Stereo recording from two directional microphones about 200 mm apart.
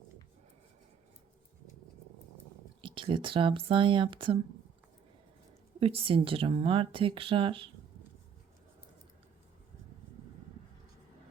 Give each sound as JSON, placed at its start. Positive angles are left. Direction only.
{"t": 2.8, "sound": "speech", "side_deg": -25}
{"t": 5.8, "sound": "speech", "side_deg": -30}